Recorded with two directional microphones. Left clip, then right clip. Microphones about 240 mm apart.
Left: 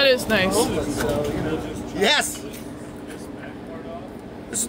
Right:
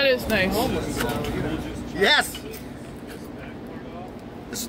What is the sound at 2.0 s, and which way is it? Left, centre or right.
Speech, centre.